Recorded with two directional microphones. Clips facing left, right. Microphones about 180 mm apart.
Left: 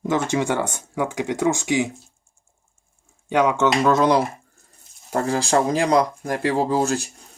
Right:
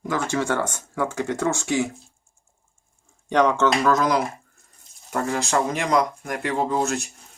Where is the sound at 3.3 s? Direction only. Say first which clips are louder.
Even; 10° left (ahead or behind).